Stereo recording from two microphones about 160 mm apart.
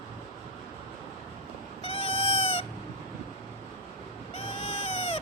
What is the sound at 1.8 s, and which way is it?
Cat, 35° left (ahead or behind).